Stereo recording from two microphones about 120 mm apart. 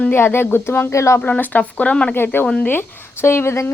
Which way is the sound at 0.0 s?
20° left (ahead or behind).